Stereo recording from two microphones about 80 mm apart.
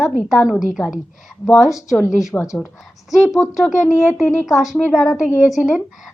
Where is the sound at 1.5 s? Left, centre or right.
Centre.